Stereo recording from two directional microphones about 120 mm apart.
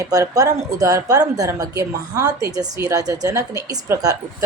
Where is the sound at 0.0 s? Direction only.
30° right (ahead or behind).